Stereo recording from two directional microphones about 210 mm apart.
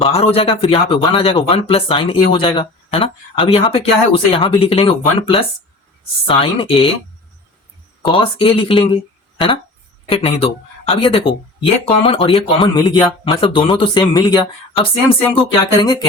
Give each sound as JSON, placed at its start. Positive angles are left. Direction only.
{"t": 0.0, "sound": "speech", "side_deg": 25}
{"t": 8.0, "sound": "speech", "side_deg": 25}
{"t": 10.1, "sound": "speech", "side_deg": 25}